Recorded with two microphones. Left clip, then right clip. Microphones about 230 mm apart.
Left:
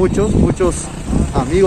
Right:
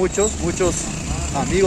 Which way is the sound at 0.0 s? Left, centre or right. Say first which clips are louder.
Left 5 dB; centre.